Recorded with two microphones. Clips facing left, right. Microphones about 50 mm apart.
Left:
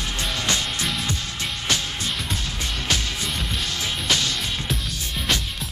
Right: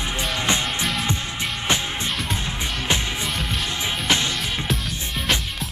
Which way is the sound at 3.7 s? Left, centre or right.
Right.